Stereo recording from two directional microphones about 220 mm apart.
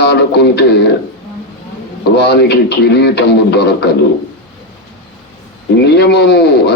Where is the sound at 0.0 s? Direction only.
50° left (ahead or behind).